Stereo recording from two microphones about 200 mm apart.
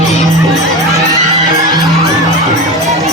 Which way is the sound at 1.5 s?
20° right (ahead or behind).